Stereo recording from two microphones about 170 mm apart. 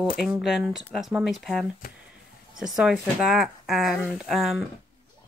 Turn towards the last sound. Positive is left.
turn(degrees=0)  # may be behind; listen again after turning